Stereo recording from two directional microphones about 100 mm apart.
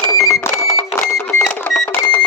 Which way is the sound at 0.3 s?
30° left (ahead or behind).